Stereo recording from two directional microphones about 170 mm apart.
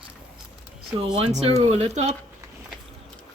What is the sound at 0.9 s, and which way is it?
Speech, 35° right (ahead or behind).